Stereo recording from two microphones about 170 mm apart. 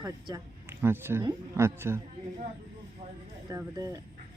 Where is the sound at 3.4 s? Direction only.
20° right (ahead or behind).